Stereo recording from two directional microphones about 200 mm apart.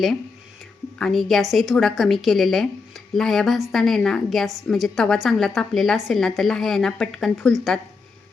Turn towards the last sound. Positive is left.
turn(degrees=0)  # may be behind; listen again after turning